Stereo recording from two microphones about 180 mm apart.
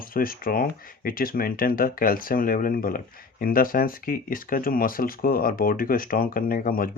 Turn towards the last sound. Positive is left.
turn(degrees=50)  # may be behind; listen again after turning